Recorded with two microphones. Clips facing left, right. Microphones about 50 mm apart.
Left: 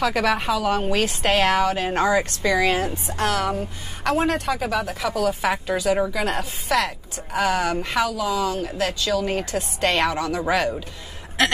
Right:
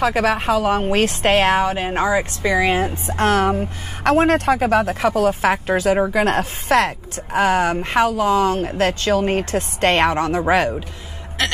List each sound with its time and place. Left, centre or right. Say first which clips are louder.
0.0 s a woman's voice: right 3 dB; right
7.3 s speech: right 5 dB; right
11.4 s a sound: left 2 dB; centre